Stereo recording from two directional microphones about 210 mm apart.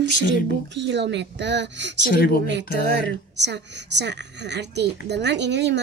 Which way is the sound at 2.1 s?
45° left (ahead or behind).